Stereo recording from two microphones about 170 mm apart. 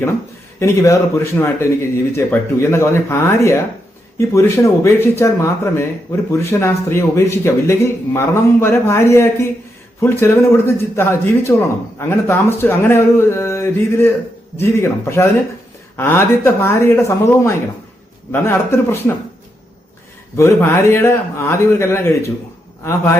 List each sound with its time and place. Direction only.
0.6 s speech: 20° left (ahead or behind)
20.3 s speech: 15° left (ahead or behind)